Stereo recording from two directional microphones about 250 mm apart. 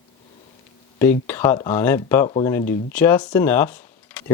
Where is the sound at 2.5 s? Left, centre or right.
Centre.